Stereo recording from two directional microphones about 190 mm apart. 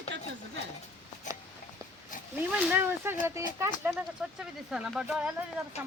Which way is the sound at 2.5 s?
10° right (ahead or behind).